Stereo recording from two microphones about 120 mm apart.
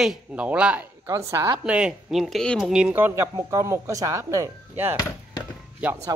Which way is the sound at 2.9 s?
20° right (ahead or behind).